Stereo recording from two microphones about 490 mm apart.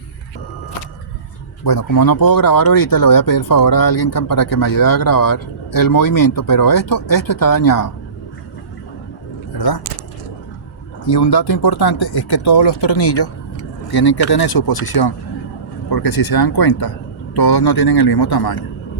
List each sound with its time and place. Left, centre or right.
1.6 s speech: left
9.6 s speech: left
11.1 s speech: left
11.9 s speech: left